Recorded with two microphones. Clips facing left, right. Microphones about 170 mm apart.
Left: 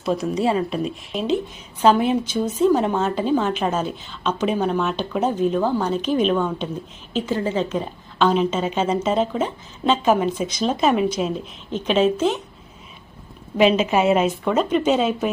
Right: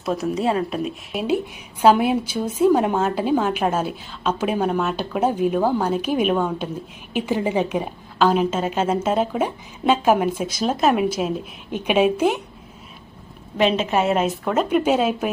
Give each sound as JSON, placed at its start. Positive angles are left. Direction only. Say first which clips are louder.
{"t": 0.0, "sound": "a woman's voice", "louder": "left 1 dB", "side_deg": -5}
{"t": 13.6, "sound": "a woman's voice", "louder": "left 2 dB", "side_deg": 5}